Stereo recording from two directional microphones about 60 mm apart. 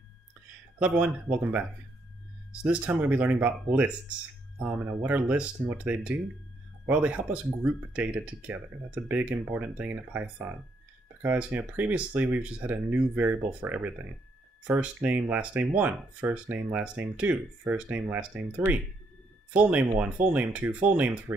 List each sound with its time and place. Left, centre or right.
0.7 s speech: right
11.2 s speech: right
19.7 s speech: right